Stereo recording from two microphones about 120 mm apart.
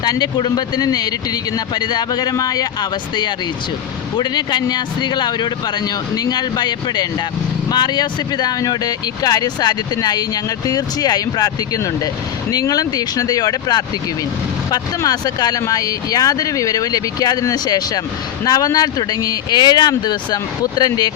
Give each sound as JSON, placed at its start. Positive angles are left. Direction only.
{"t": 0.0, "sound": "speech", "side_deg": 35}
{"t": 4.2, "sound": "speech", "side_deg": 35}